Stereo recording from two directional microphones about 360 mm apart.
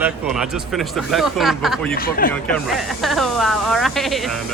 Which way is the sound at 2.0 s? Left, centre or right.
Left.